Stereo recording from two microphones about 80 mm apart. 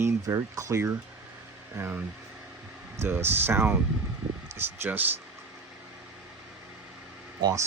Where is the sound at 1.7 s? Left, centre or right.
Right.